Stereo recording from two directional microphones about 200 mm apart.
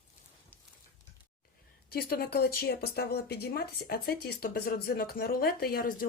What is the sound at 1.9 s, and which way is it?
Speech, 50° left (ahead or behind).